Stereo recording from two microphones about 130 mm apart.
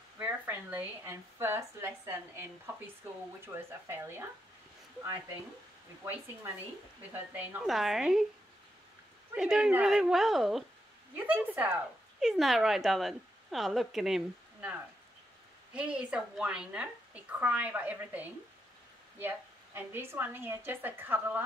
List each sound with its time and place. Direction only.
0.2 s a woman's voice: 15° right (ahead or behind)
3.5 s speech: 20° right (ahead or behind)
7.6 s a woman's voice: centre (ahead or behind)
9.3 s a woman's voice: 5° right (ahead or behind)
11.2 s a woman's voice: 15° right (ahead or behind)